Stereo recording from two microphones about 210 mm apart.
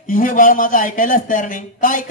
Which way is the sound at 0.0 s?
40° left (ahead or behind).